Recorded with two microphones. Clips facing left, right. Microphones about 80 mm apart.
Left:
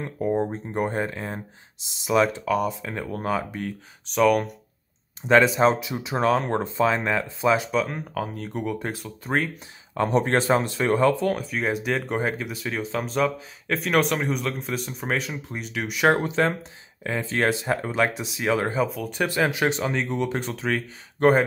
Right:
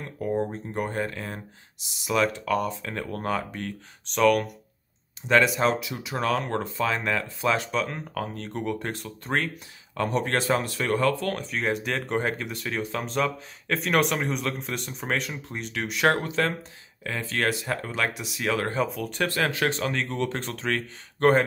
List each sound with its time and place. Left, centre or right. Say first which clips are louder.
0.0 s speech: left 3 dB; left
2.4 s speech: left 2 dB; centre
5.3 s speech: left 4 dB; left; by 9.5 s centre
9.9 s speech: left 4 dB; left
11.3 s speech: left 1 dB; centre
16.1 s speech: left 4 dB; left
18.8 s speech: left 2 dB; centre
19.2 s speech: left 3 dB; centre